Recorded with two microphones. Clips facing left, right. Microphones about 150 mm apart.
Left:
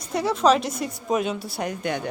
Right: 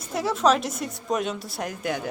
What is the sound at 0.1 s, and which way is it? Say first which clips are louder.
A woman's voice: left 2 dB; centre (ahead or behind).